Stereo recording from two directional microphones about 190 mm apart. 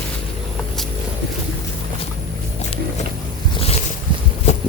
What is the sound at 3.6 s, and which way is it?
Boat, 30° left (ahead or behind).